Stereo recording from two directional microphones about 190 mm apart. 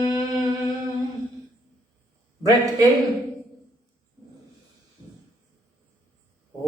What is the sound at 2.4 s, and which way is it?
Speech, 20° right (ahead or behind).